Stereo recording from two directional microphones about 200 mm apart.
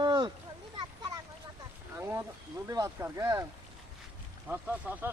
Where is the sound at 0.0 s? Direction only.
20° right (ahead or behind).